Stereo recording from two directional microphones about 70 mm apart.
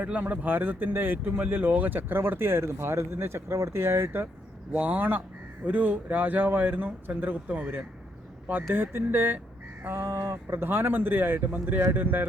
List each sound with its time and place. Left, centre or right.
0.0 s speech: right